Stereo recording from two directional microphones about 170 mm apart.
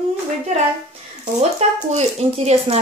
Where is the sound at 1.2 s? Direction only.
40° right (ahead or behind).